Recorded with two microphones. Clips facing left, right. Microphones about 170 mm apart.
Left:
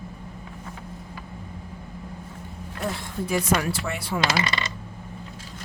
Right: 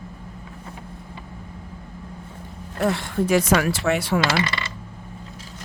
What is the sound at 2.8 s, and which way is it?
Speech, 80° right.